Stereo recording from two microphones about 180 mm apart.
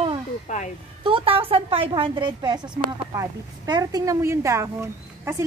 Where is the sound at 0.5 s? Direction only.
45° left (ahead or behind).